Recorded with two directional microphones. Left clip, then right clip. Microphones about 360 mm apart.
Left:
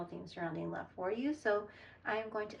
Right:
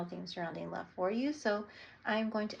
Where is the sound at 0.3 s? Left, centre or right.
Centre.